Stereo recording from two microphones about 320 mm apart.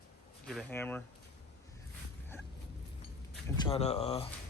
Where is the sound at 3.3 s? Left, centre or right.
Centre.